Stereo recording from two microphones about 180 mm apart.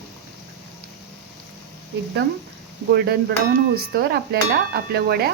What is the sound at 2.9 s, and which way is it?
Speech, 60° right (ahead or behind).